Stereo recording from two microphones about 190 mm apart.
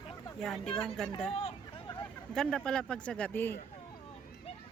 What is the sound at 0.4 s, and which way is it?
Speech, 5° left (ahead or behind).